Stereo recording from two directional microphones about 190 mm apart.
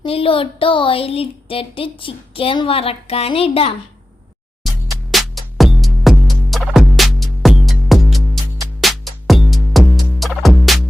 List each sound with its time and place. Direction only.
0.0 s a woman's voice: 30° left (ahead or behind)
5.1 s music: centre (ahead or behind)